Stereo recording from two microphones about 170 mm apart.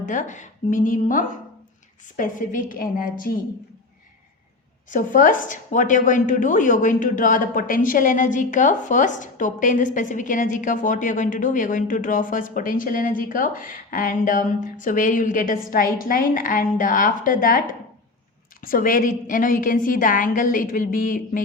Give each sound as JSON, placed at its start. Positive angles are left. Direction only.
{"t": 0.0, "sound": "a woman's voice", "side_deg": 50}
{"t": 4.9, "sound": "a woman's voice", "side_deg": 50}